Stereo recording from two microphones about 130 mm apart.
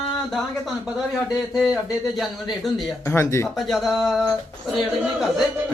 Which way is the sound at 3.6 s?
Centre (ahead or behind).